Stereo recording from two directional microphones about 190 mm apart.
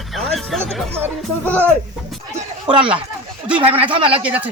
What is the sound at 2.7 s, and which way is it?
Speech, 25° right (ahead or behind).